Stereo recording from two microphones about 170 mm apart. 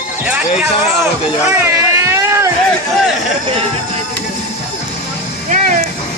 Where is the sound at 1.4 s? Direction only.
15° right (ahead or behind).